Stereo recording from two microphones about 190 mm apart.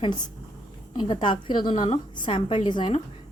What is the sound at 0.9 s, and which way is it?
A woman's voice, 25° left (ahead or behind).